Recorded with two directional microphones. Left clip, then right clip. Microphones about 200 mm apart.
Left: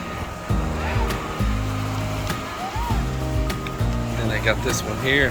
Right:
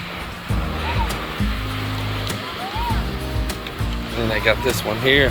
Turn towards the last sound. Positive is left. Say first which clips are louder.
# right 4 dB
turn(degrees=10)  # may be behind; listen again after turning